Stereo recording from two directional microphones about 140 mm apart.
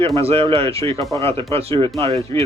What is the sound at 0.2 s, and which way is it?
Speech, 40° right (ahead or behind).